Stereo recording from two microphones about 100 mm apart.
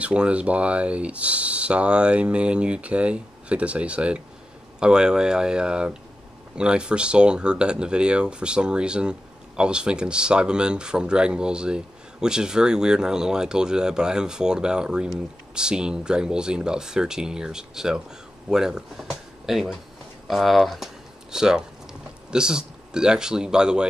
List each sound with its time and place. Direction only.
0.0 s speech: 10° right (ahead or behind)